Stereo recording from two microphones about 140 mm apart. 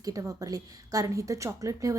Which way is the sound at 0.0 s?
25° right (ahead or behind).